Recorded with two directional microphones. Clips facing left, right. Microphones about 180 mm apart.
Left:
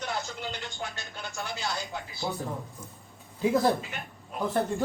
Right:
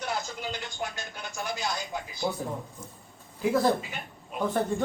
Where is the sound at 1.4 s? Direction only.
15° right (ahead or behind).